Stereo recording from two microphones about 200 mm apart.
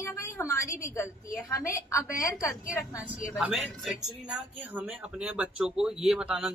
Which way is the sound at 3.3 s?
Centre (ahead or behind).